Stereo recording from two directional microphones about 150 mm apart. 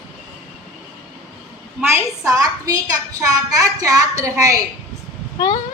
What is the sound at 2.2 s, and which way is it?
Speech, 20° right (ahead or behind).